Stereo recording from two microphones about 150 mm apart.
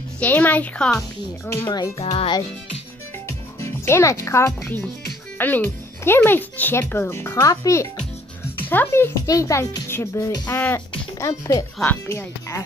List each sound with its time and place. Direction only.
0.2 s speech: 10° left (ahead or behind)
1.5 s a child's voice: 20° left (ahead or behind)
3.3 s music: 15° left (ahead or behind)
5.4 s a child's voice: 15° left (ahead or behind)